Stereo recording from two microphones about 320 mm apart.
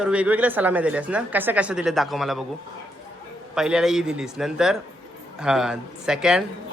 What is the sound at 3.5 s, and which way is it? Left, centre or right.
Speech, centre.